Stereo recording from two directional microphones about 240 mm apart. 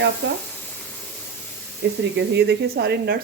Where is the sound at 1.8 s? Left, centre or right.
Right.